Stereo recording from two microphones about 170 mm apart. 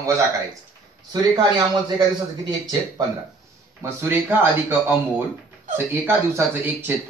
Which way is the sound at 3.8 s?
15° right (ahead or behind).